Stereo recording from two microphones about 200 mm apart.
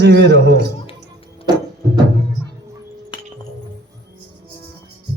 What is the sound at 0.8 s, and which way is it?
Music, 25° left (ahead or behind).